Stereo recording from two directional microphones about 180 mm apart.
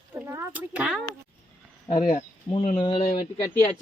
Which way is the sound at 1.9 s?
25° left (ahead or behind).